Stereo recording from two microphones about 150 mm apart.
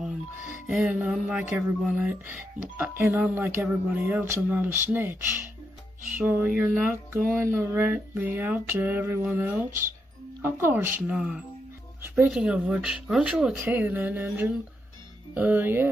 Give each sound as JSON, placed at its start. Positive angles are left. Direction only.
{"t": 0.7, "sound": "speech", "side_deg": -10}